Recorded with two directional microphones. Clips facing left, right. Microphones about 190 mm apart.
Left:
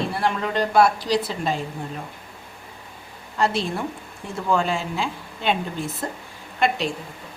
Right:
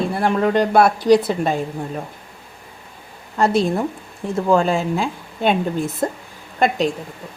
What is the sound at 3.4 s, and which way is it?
Speech, 45° right (ahead or behind).